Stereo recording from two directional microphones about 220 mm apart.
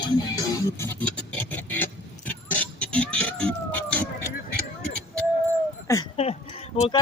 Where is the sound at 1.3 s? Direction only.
10° left (ahead or behind).